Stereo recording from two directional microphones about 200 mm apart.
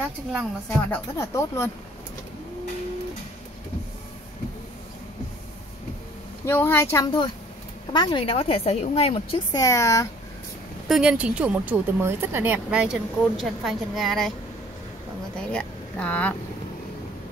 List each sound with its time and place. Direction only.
0.7 s speech: 15° left (ahead or behind)
6.4 s a woman's voice: 10° left (ahead or behind); by 9.4 s 30° left (ahead or behind)
9.5 s speech: 15° left (ahead or behind)
10.9 s speech: 5° right (ahead or behind)
15.5 s speech: 5° left (ahead or behind)